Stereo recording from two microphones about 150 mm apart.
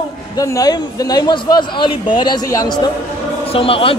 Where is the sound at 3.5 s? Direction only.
40° left (ahead or behind).